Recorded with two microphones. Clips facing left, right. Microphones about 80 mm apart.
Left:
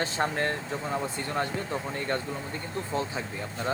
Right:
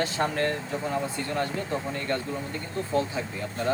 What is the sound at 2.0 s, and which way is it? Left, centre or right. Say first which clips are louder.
Speech: left 1 dB; left.